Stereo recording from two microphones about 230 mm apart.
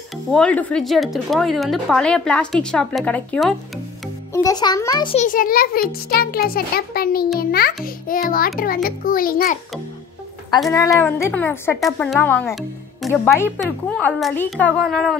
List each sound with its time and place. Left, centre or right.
0.3 s a woman's voice: centre
4.3 s speech: centre
5.2 s a child's voice: left
10.9 s a woman's voice: centre